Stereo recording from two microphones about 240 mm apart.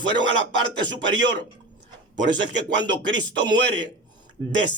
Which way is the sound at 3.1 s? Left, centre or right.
Right.